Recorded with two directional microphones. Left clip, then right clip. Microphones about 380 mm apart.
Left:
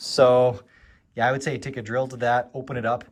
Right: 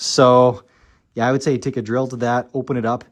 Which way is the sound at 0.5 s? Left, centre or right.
Centre.